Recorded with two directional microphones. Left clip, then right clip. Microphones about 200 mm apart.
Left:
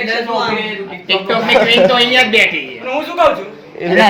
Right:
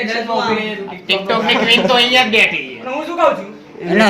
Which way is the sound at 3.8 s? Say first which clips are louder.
Left 3 dB; 40° left (ahead or behind).